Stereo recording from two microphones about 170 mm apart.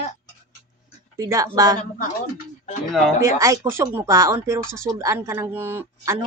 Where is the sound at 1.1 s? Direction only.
20° right (ahead or behind).